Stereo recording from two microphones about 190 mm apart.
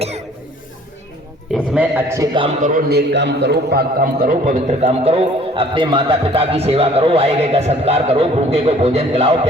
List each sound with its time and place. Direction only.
1.5 s a man's voice: 5° right (ahead or behind)
2.6 s a man's voice: 40° right (ahead or behind)
2.9 s a man's voice: 65° right (ahead or behind); by 9.5 s 35° right (ahead or behind)